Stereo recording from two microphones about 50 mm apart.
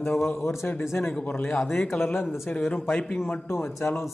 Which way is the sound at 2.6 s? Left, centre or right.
Left.